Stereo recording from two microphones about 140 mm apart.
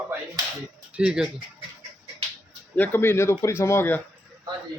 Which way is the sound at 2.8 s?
15° left (ahead or behind).